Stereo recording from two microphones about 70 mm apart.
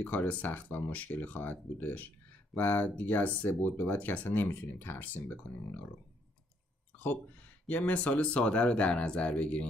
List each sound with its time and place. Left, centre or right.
0.0 s speech: left
7.6 s speech: left